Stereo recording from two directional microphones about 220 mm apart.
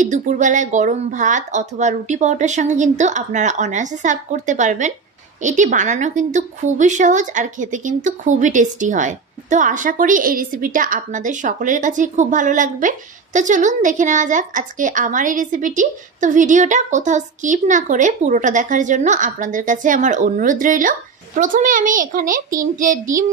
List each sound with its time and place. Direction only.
0.0 s a woman's voice: 35° right (ahead or behind)